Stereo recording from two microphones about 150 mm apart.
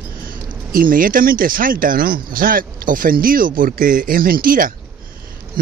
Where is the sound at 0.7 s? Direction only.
70° right (ahead or behind).